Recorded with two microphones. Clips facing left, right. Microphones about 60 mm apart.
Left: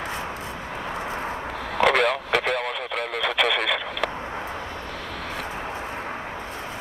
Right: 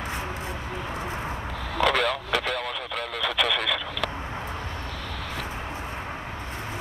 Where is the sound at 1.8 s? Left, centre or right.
Left.